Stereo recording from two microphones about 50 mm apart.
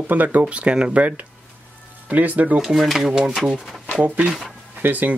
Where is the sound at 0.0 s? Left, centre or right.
Right.